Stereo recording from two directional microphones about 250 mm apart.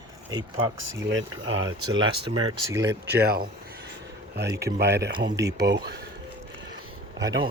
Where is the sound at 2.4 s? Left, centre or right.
Centre.